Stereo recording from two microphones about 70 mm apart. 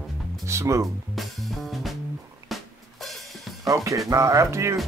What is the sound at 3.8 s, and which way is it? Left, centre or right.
Speech, right.